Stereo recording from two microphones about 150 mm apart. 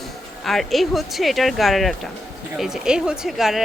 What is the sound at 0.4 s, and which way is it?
A woman's voice, centre (ahead or behind).